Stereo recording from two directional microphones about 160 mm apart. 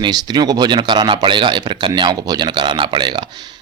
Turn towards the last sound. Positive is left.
turn(degrees=-25)  # may be behind; listen again after turning